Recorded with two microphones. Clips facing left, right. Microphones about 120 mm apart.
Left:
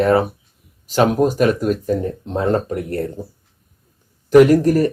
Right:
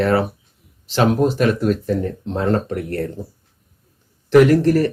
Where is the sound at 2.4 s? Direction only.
30° left (ahead or behind).